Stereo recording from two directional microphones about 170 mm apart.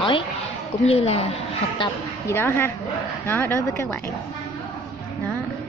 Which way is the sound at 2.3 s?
15° left (ahead or behind).